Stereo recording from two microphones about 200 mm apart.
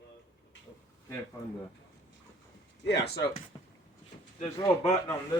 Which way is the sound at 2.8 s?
60° left (ahead or behind).